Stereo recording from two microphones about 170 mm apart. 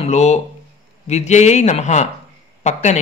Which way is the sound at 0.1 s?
40° left (ahead or behind).